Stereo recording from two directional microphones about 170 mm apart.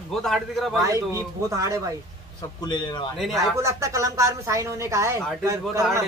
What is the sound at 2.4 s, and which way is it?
Speech, 25° left (ahead or behind).